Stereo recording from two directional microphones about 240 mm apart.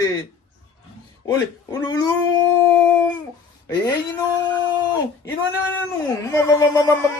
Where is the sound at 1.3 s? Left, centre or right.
Centre.